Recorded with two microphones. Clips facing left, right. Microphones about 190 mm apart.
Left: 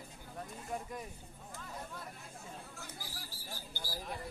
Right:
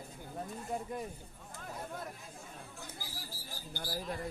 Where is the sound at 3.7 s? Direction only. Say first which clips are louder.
Right 6 dB; 55° right (ahead or behind).